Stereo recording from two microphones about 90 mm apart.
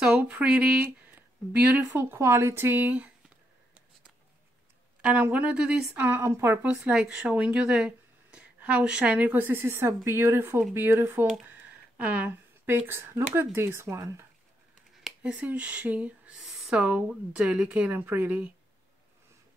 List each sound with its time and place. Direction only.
0.0 s speech: 15° right (ahead or behind)
2.0 s speech: 25° right (ahead or behind)
5.0 s speech: 15° right (ahead or behind)
6.0 s speech: 25° right (ahead or behind)
6.6 s speech: 10° right (ahead or behind); by 14.2 s 30° right (ahead or behind)
15.0 s a sound: 5° right (ahead or behind)
15.4 s speech: 15° right (ahead or behind)